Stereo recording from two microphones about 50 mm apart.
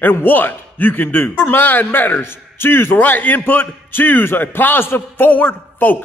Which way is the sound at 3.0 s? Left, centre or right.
Left.